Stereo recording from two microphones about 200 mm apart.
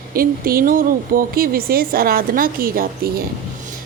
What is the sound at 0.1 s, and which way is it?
A woman's voice, 45° right (ahead or behind).